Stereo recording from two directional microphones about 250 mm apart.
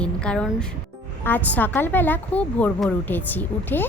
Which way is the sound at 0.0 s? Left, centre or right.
Centre.